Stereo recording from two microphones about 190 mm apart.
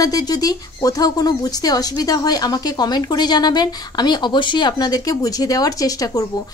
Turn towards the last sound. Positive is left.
turn(degrees=20)  # may be behind; listen again after turning